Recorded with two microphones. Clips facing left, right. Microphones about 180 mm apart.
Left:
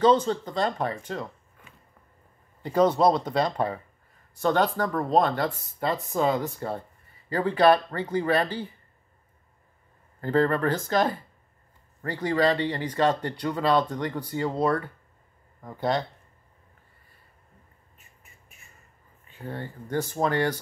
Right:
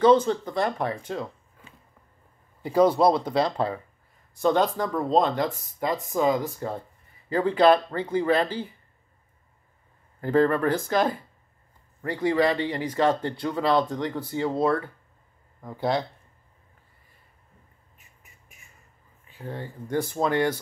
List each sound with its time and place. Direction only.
0.0 s speech: 10° right (ahead or behind)
2.6 s speech: 10° right (ahead or behind)
10.2 s speech: 15° right (ahead or behind)
19.5 s speech: 10° right (ahead or behind)